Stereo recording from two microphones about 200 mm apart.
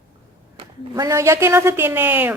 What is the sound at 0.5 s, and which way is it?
A woman's voice, 15° right (ahead or behind).